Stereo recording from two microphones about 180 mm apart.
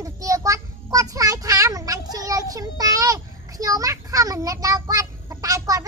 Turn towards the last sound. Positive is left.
turn(degrees=-20)  # may be behind; listen again after turning